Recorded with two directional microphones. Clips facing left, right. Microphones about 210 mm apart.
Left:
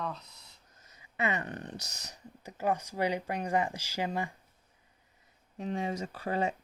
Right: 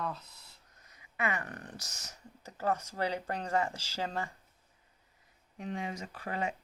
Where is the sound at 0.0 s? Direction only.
5° right (ahead or behind).